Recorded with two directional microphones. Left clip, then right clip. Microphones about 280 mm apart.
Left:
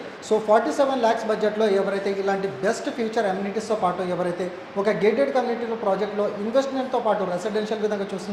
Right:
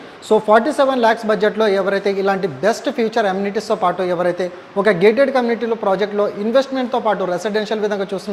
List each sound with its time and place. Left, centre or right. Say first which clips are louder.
0.3 s speech: right 6 dB; right